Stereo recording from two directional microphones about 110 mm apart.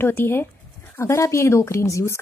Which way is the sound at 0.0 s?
20° left (ahead or behind).